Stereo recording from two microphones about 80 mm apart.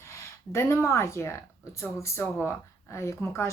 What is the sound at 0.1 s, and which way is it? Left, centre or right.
Speech, left.